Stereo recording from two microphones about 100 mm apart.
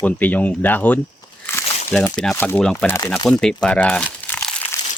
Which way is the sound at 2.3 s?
25° left (ahead or behind).